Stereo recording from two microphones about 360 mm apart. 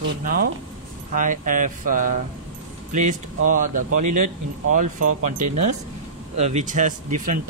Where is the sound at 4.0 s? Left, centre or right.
Right.